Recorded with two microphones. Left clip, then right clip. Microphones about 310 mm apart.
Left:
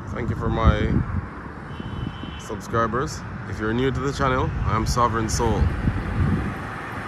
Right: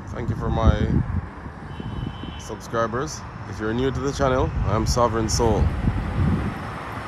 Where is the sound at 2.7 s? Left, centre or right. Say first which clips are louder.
Left 1 dB; centre.